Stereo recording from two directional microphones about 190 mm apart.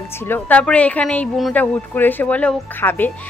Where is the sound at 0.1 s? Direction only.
10° left (ahead or behind).